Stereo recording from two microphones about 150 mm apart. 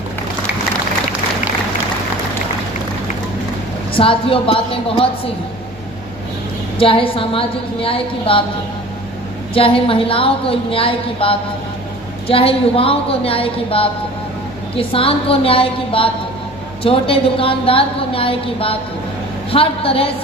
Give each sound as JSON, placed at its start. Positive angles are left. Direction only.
{"t": 3.9, "sound": "a woman's voice", "side_deg": 35}
{"t": 6.7, "sound": "a woman's voice", "side_deg": 35}
{"t": 9.6, "sound": "a woman's voice", "side_deg": 40}